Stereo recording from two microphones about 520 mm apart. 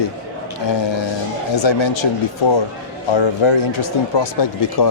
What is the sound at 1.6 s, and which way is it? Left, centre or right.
Speech, left.